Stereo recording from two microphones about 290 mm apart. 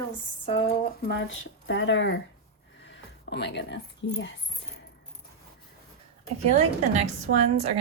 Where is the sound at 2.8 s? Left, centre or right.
Left.